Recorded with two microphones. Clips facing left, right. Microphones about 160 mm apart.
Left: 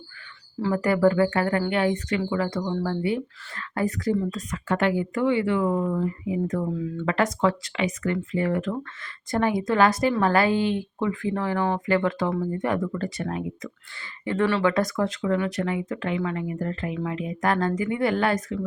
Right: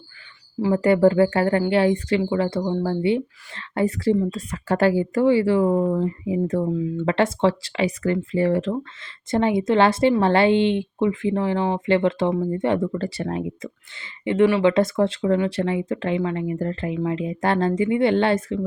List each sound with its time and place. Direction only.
0.6 s speech: 25° right (ahead or behind)